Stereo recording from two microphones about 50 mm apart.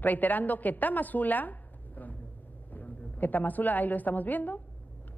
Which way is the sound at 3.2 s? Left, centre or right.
Left.